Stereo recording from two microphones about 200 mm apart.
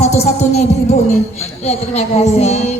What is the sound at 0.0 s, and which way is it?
A man's voice, 35° left (ahead or behind).